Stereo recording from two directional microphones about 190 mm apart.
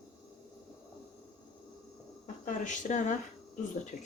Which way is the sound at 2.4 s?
40° left (ahead or behind).